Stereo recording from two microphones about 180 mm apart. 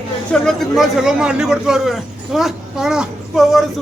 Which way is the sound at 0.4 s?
Centre (ahead or behind).